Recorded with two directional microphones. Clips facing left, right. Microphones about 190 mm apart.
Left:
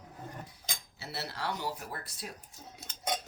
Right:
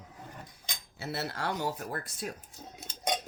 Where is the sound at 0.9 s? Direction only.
50° right (ahead or behind).